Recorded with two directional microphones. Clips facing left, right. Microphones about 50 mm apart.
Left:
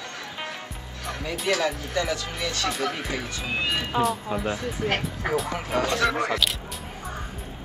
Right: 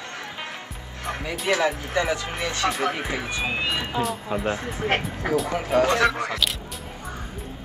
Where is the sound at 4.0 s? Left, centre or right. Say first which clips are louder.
Left 1 dB; centre.